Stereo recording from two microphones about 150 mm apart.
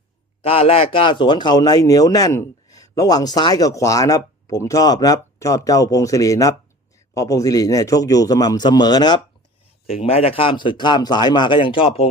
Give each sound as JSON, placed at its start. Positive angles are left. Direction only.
{"t": 0.4, "sound": "a man's voice", "side_deg": 40}
{"t": 9.8, "sound": "a man's voice", "side_deg": 40}